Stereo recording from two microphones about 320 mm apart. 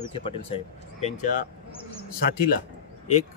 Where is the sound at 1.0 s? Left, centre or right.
Left.